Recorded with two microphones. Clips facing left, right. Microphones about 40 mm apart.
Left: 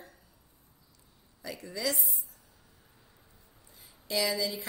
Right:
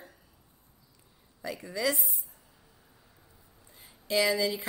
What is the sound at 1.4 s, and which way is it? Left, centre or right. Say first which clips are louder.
Speech: right 4 dB; centre.